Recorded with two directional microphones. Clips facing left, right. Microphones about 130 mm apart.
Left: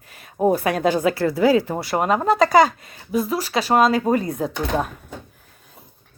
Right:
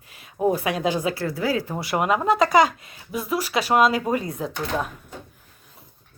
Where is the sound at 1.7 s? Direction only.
35° left (ahead or behind).